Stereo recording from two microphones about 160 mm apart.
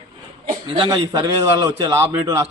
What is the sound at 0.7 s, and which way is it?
A man's voice, 30° right (ahead or behind).